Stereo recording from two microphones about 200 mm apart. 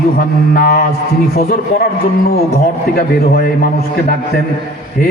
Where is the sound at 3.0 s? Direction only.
50° left (ahead or behind).